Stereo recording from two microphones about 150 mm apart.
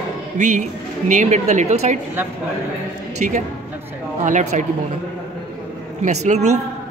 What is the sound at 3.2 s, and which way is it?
Speech, 55° right (ahead or behind).